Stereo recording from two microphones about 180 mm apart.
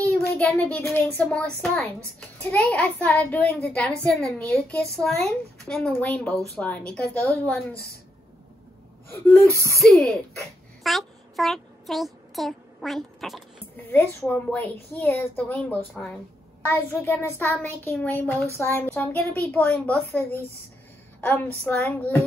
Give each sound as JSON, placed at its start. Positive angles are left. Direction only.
{"t": 0.2, "sound": "a woman's voice", "side_deg": 10}
{"t": 9.1, "sound": "speech", "side_deg": 15}
{"t": 9.5, "sound": "speech", "side_deg": -15}
{"t": 9.8, "sound": "a woman's voice", "side_deg": 0}